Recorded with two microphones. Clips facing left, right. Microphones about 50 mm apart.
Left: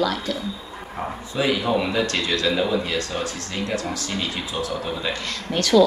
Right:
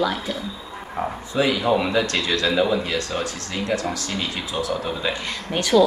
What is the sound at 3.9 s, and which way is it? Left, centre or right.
A woman's voice, centre.